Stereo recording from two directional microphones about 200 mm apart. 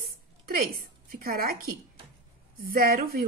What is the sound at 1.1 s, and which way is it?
A woman's voice, 50° right (ahead or behind).